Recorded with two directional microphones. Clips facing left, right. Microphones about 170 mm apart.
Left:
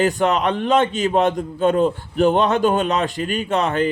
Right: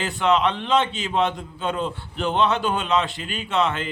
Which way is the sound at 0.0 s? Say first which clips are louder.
Left 3 dB; 45° left (ahead or behind).